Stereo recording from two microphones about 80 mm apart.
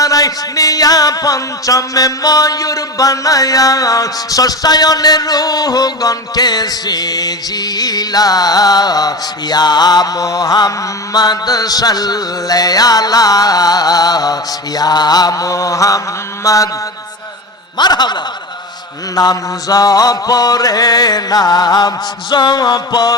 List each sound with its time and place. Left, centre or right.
0.0 s speech: left
16.4 s mantra: left
17.7 s a man's voice: left
19.1 s speech: left